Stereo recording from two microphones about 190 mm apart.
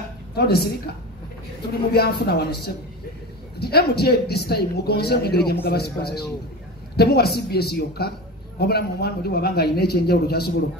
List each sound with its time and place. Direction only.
0.4 s speech: 55° left (ahead or behind)
1.9 s speech: 55° left (ahead or behind)